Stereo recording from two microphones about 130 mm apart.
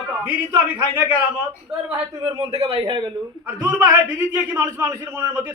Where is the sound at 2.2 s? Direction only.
50° right (ahead or behind).